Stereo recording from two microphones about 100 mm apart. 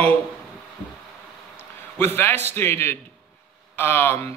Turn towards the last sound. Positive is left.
turn(degrees=25)  # may be behind; listen again after turning